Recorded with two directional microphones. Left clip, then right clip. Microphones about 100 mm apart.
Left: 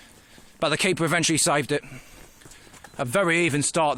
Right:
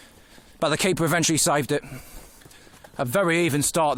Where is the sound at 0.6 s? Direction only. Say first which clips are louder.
Even; 60° right (ahead or behind).